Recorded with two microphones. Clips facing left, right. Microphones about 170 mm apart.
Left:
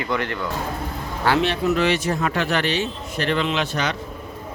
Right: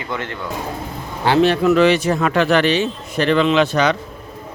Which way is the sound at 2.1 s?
90° right.